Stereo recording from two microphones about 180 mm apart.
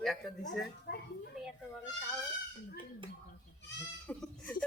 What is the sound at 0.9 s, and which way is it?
Speech, 65° left (ahead or behind).